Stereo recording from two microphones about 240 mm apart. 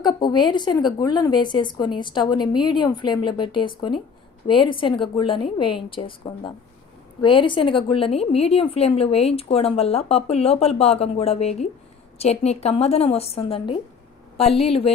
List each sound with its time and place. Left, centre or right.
0.0 s a woman's voice: centre